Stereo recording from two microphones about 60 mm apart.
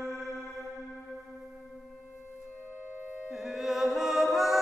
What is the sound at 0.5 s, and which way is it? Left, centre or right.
Music, centre.